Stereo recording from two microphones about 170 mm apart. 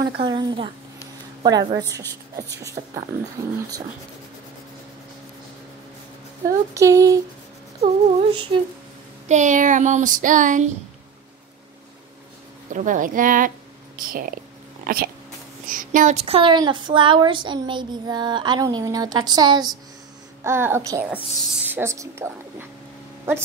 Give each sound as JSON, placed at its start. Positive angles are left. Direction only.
{"t": 0.2, "sound": "a woman's voice", "side_deg": -25}
{"t": 6.4, "sound": "speech", "side_deg": -20}
{"t": 7.8, "sound": "speech", "side_deg": -30}
{"t": 9.3, "sound": "child singing", "side_deg": -45}
{"t": 12.7, "sound": "child singing", "side_deg": -50}
{"t": 13.9, "sound": "speech", "side_deg": -55}
{"t": 20.4, "sound": "a woman's voice", "side_deg": -15}